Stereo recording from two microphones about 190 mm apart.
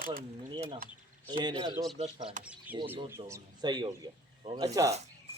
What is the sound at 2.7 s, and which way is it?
A man's voice, 10° right (ahead or behind).